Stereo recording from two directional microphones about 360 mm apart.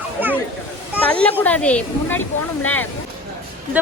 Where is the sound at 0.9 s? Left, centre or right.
Centre.